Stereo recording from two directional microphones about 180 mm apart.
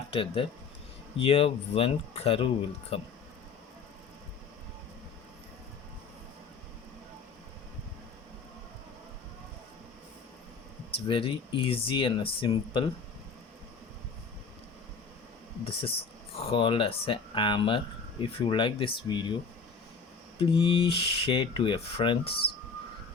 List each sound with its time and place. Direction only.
0.1 s speech: 30° left (ahead or behind)
10.9 s speech: 30° left (ahead or behind)
15.6 s speech: 30° left (ahead or behind)
20.4 s speech: 30° left (ahead or behind)